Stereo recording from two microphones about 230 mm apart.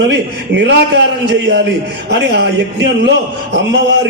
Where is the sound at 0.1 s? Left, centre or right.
Right.